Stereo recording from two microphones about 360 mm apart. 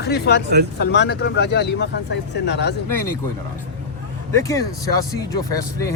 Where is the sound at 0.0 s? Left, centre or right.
Left.